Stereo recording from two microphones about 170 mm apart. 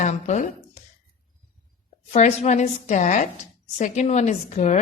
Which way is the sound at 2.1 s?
40° left (ahead or behind).